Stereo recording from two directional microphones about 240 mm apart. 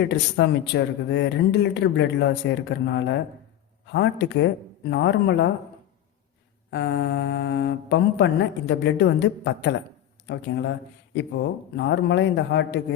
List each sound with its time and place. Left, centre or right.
0.0 s speech: left
6.7 s speech: left